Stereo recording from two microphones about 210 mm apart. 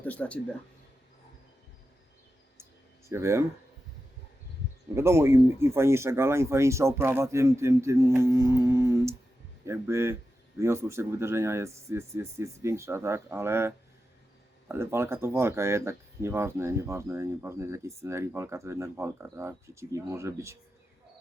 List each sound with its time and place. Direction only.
0.0 s speech: 5° left (ahead or behind)
3.1 s speech: 10° right (ahead or behind)
4.9 s speech: 10° right (ahead or behind)